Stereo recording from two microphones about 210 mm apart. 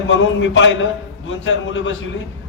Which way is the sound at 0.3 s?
60° left (ahead or behind).